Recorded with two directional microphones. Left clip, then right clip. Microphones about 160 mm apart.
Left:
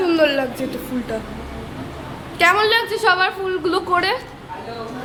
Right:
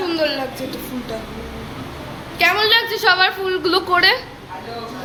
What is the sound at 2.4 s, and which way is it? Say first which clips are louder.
Speech: left 1 dB; 35° left (ahead or behind).